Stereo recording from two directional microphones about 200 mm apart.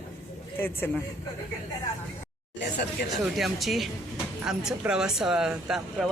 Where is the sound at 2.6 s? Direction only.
60° left (ahead or behind).